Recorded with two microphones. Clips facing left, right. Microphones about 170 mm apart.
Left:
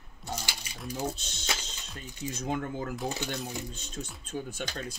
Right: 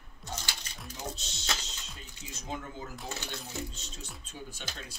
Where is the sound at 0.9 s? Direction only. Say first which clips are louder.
Left 7 dB; 50° left (ahead or behind).